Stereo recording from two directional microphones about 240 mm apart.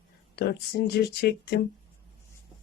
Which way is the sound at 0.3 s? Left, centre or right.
Left.